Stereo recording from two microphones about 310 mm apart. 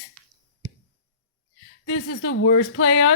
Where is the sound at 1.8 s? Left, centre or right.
Left.